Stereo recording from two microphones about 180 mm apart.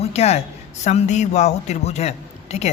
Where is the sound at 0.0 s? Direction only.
35° left (ahead or behind).